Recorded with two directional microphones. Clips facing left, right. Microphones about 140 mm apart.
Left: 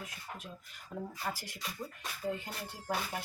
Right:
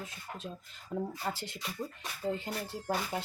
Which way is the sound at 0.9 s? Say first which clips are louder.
Right 4 dB; 25° right (ahead or behind).